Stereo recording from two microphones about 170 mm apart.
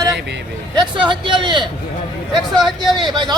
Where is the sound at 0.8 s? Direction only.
30° right (ahead or behind).